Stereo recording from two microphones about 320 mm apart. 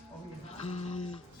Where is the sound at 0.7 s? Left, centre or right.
Centre.